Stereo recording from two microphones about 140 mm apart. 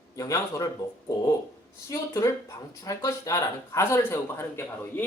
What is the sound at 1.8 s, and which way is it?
Speech, 20° left (ahead or behind).